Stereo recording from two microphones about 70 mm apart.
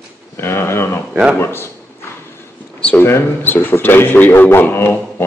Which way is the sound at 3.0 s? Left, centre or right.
Left.